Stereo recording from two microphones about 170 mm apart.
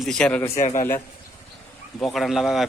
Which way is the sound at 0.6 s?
40° left (ahead or behind).